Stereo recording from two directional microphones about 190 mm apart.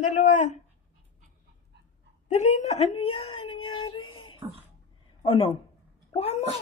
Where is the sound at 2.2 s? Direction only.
35° left (ahead or behind).